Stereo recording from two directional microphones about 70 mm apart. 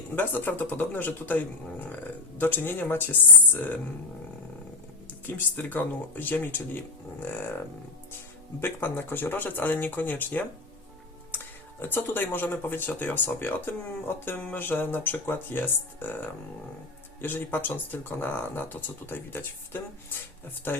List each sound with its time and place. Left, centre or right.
0.2 s speech: left
5.2 s speech: left
8.6 s speech: left
11.8 s speech: left
17.2 s speech: left